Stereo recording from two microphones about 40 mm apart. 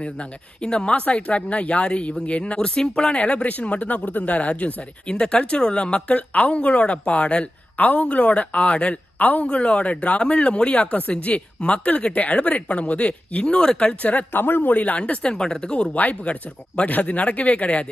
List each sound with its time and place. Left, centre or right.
0.0 s speech: left
3.2 s speech: left
5.0 s speech: left
9.2 s speech: left
9.5 s speech: left
14.3 s speech: left
14.7 s speech: left
15.0 s speech: left
15.9 s speech: left